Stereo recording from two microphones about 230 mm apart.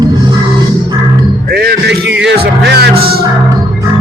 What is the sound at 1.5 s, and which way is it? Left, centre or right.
Music, right.